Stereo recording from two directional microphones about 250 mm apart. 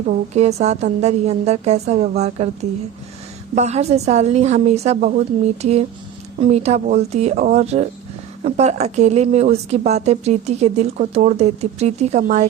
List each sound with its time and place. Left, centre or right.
0.1 s speech: right
6.4 s speech: right